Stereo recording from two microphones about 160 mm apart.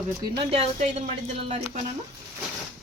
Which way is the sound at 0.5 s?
40° right (ahead or behind).